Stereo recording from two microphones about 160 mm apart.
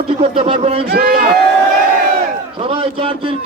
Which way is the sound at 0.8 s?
75° right (ahead or behind).